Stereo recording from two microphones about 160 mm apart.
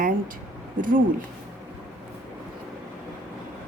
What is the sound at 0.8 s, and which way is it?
Speech, 60° right (ahead or behind).